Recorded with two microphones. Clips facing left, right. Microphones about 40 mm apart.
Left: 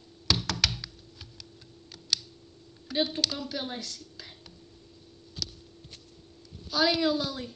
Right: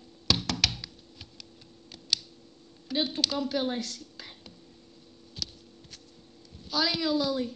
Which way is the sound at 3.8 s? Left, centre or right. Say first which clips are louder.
Right 4 dB; right.